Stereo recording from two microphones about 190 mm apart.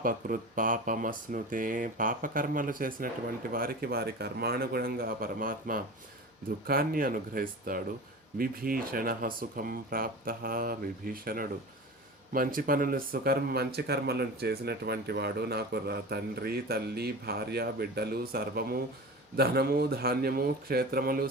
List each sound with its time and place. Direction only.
0.0 s speech: 45° right (ahead or behind)